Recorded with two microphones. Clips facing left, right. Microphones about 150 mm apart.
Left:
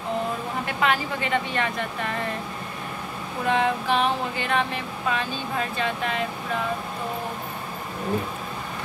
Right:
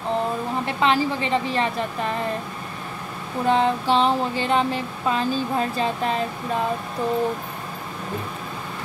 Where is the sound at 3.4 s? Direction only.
30° right (ahead or behind).